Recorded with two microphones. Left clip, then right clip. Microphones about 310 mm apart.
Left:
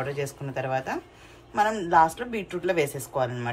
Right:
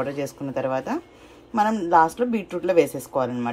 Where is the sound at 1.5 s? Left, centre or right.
Right.